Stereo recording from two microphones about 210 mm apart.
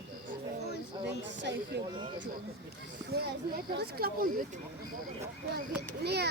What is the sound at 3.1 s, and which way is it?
Speech, 50° right (ahead or behind).